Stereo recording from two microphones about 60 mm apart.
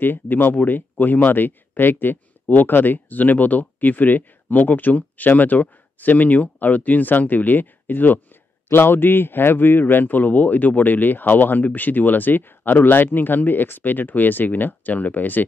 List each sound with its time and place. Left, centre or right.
0.0 s a man's voice: left